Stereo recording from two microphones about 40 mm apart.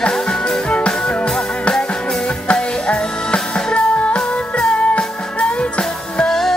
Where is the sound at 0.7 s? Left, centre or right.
Left.